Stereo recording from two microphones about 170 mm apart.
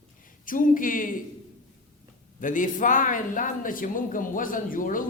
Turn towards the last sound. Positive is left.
turn(degrees=55)  # may be behind; listen again after turning